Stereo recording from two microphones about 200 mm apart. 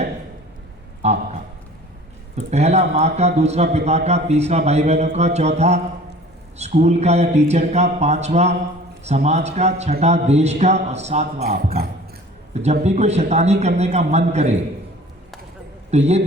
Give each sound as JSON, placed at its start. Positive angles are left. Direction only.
{"t": 1.0, "sound": "a man's voice", "side_deg": -35}
{"t": 2.3, "sound": "a man's voice", "side_deg": -35}
{"t": 12.8, "sound": "a man's voice", "side_deg": -35}
{"t": 15.9, "sound": "a man's voice", "side_deg": -35}